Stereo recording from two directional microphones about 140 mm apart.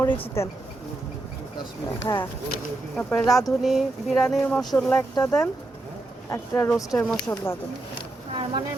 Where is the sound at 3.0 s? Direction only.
5° left (ahead or behind).